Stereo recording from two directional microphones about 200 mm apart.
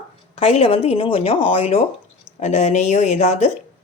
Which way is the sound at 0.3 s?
30° left (ahead or behind).